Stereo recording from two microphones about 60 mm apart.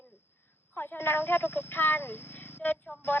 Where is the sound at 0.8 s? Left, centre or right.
Left.